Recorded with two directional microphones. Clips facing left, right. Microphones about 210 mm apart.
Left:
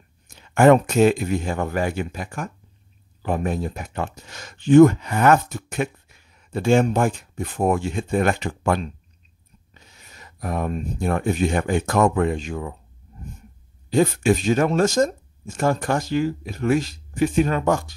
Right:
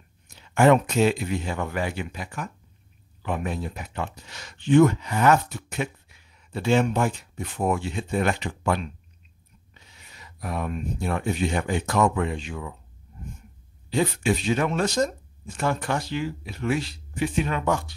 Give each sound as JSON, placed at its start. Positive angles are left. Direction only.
{"t": 0.3, "sound": "speech", "side_deg": 50}
{"t": 13.8, "sound": "speech", "side_deg": 45}